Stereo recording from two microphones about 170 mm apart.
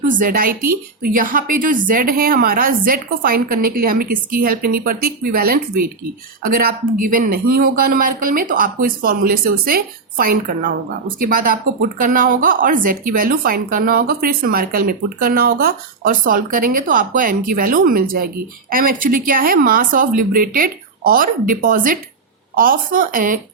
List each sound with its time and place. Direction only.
0.2 s a woman's voice: 55° right (ahead or behind)